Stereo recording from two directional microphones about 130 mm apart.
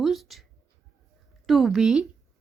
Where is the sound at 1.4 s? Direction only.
Centre (ahead or behind).